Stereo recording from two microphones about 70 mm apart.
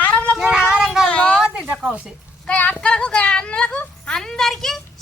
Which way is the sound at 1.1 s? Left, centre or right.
Centre.